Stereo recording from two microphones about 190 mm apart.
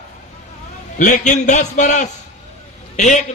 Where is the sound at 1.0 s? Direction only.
40° left (ahead or behind).